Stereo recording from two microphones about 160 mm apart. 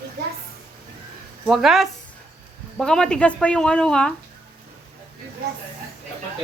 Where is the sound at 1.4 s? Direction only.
Centre (ahead or behind).